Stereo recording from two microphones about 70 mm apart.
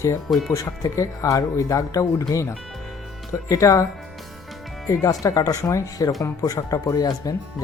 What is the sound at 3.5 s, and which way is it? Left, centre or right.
Speech, left.